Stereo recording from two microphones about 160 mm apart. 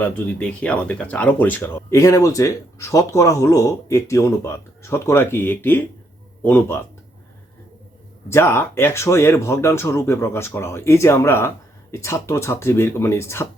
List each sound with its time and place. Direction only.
0.0 s speech: 5° left (ahead or behind)
8.3 s speech: 15° left (ahead or behind)